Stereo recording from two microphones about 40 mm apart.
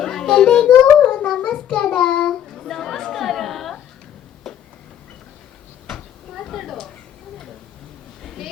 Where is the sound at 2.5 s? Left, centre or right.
Centre.